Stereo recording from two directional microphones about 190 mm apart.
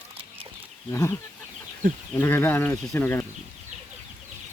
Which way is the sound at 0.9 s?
15° left (ahead or behind).